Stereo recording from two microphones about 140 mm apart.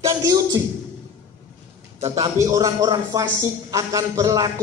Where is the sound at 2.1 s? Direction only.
25° right (ahead or behind).